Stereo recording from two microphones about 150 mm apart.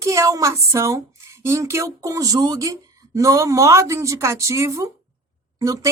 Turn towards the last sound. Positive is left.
turn(degrees=-25)  # may be behind; listen again after turning